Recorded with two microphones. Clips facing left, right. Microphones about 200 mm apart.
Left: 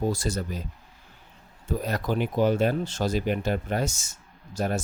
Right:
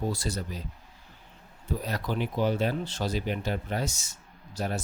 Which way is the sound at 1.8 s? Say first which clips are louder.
Left 4 dB; 50° left (ahead or behind).